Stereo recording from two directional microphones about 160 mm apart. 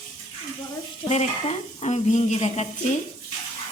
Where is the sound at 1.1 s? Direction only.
40° left (ahead or behind).